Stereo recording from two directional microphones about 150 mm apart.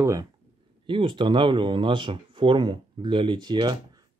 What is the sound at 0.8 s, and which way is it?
Speech, 35° right (ahead or behind).